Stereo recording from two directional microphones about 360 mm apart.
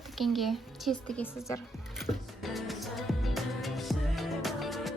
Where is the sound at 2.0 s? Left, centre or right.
Centre.